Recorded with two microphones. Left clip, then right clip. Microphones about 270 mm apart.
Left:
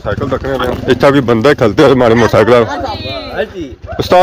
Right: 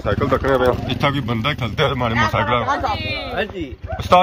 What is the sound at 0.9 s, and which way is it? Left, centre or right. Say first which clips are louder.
Speech: left 12 dB; centre.